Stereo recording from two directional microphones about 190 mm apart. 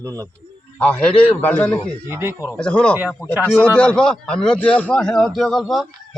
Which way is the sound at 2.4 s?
10° left (ahead or behind).